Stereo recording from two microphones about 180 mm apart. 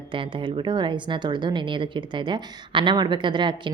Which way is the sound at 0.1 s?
30° right (ahead or behind).